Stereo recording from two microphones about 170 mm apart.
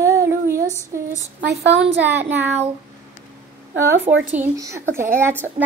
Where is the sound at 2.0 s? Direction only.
10° right (ahead or behind).